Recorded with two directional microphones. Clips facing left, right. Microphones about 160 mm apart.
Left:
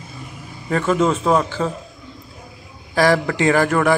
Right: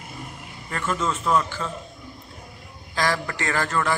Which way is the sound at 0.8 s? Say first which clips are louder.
Left 8 dB; 65° left (ahead or behind).